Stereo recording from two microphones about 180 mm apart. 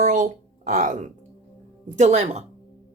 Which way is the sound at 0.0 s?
45° right (ahead or behind).